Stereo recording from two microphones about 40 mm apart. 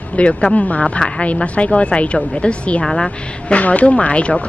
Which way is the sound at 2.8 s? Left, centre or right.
Centre.